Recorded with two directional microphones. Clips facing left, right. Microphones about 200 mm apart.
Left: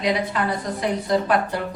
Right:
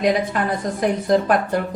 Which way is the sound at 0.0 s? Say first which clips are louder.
Right 3 dB; 50° right (ahead or behind).